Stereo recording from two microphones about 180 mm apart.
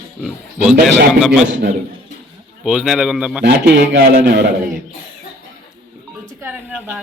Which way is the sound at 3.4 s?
60° right (ahead or behind).